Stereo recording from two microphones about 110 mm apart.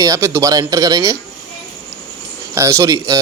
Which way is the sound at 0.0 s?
30° right (ahead or behind).